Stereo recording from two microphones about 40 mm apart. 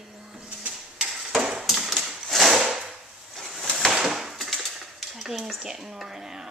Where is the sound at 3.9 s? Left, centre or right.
Centre.